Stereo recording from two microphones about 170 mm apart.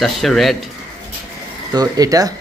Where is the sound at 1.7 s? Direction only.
20° right (ahead or behind).